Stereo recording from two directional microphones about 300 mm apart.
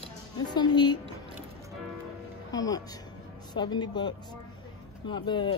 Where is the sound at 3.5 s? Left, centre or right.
Centre.